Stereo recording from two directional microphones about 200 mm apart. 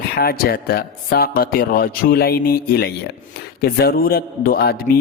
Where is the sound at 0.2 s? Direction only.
50° left (ahead or behind).